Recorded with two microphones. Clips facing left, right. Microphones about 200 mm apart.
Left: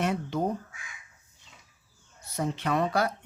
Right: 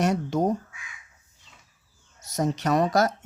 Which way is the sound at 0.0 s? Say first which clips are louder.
Right 5 dB; 45° right (ahead or behind).